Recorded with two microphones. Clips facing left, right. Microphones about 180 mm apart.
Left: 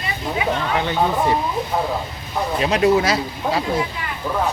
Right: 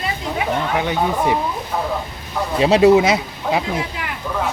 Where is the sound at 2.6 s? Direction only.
25° right (ahead or behind).